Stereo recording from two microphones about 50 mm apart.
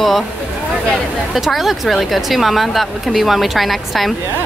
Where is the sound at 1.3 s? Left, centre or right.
Centre.